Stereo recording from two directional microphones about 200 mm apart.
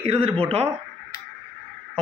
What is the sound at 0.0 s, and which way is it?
Speech, 30° right (ahead or behind).